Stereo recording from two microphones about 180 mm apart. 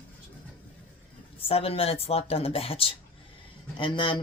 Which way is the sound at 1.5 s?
30° left (ahead or behind).